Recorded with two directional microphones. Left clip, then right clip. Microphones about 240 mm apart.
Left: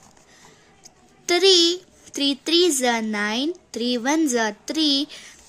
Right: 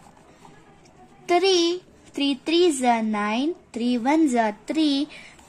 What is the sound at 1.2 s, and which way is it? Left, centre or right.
Speech, left.